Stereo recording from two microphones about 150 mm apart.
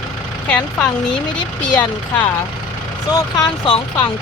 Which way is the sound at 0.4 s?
5° left (ahead or behind).